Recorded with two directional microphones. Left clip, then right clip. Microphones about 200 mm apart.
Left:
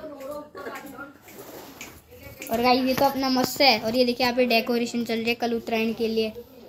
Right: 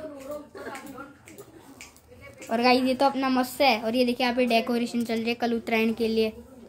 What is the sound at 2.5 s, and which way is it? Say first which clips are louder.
Speech: left 1 dB; 15° right (ahead or behind).